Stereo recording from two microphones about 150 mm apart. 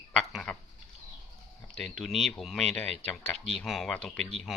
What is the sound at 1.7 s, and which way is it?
Speech, 5° left (ahead or behind).